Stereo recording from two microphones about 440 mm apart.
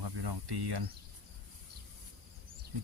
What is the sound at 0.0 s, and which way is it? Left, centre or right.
Snake, right.